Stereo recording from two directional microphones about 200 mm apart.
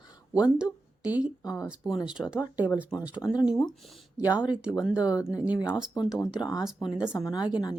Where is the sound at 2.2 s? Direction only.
5° right (ahead or behind).